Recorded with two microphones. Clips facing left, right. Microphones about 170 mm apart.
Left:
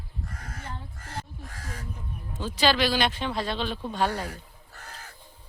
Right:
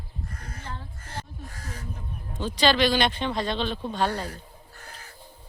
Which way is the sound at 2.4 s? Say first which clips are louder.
Right 2 dB; 5° left (ahead or behind).